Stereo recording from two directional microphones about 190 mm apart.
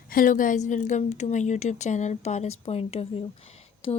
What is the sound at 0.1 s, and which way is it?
Speech, 45° left (ahead or behind).